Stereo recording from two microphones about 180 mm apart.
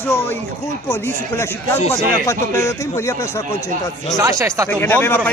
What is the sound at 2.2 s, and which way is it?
Speech, 15° left (ahead or behind).